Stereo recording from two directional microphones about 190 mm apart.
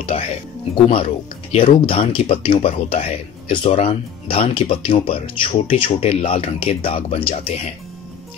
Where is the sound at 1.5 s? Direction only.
30° left (ahead or behind).